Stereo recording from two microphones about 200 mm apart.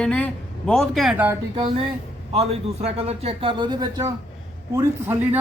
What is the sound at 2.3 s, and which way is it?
A man's voice, 30° right (ahead or behind).